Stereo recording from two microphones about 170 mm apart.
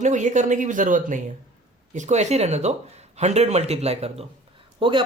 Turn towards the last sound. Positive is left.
turn(degrees=-30)  # may be behind; listen again after turning